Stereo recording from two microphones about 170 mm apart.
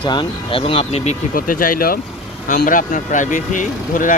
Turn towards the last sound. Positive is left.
turn(degrees=50)  # may be behind; listen again after turning